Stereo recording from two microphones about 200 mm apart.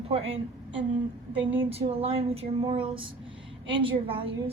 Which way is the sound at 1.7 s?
30° right (ahead or behind).